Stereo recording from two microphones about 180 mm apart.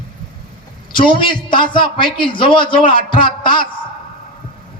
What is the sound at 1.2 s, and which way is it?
A man's voice, 25° left (ahead or behind).